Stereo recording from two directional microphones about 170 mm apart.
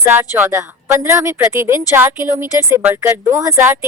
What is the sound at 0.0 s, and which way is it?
Speech, 10° right (ahead or behind).